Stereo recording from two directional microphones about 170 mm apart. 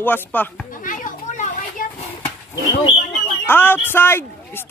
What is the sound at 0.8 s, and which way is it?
Children playing, 50° left (ahead or behind).